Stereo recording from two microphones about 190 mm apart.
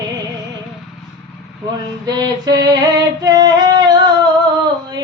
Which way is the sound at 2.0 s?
20° right (ahead or behind).